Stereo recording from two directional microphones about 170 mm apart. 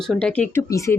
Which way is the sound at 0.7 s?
20° left (ahead or behind).